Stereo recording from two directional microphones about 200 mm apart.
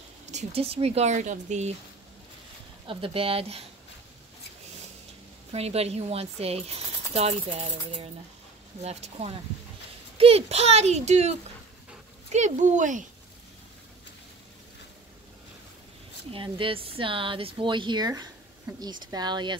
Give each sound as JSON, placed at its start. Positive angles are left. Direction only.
{"t": 0.3, "sound": "speech", "side_deg": -35}
{"t": 2.9, "sound": "speech", "side_deg": -25}
{"t": 5.5, "sound": "speech", "side_deg": -30}
{"t": 16.3, "sound": "speech", "side_deg": -25}